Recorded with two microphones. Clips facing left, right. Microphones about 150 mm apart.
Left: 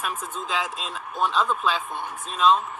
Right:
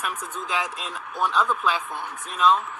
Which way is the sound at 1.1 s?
20° left (ahead or behind).